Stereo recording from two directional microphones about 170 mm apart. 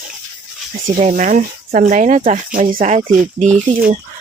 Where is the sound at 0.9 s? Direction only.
45° right (ahead or behind).